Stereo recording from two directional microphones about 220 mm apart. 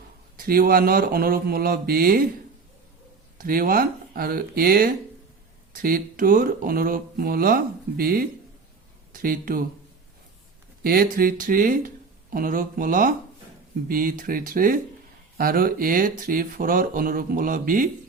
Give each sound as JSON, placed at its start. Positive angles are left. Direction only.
{"t": 0.3, "sound": "speech", "side_deg": -40}
{"t": 3.3, "sound": "speech", "side_deg": -40}
{"t": 10.8, "sound": "speech", "side_deg": -40}